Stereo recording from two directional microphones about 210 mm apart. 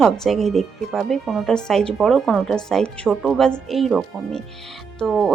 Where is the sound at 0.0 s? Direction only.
Centre (ahead or behind).